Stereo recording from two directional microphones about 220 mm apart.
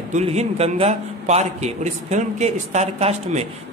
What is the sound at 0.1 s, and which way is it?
A man's voice, 30° right (ahead or behind).